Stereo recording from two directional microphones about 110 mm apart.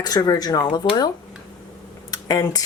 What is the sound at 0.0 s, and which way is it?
Speech, 35° left (ahead or behind).